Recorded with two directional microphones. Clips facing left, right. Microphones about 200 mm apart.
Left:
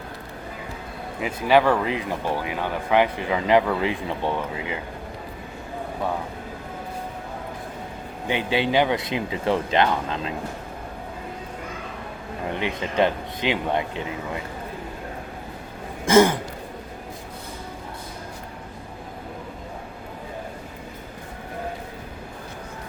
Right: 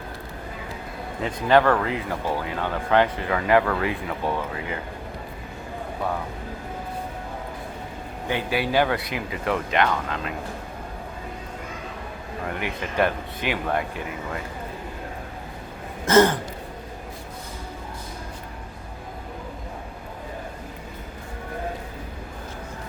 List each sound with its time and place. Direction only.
1.2 s speech: 10° left (ahead or behind)
8.3 s speech: 20° left (ahead or behind)
12.5 s speech: 20° left (ahead or behind)
16.0 s speech: 10° left (ahead or behind)